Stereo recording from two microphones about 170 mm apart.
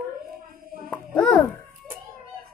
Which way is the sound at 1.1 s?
5° left (ahead or behind).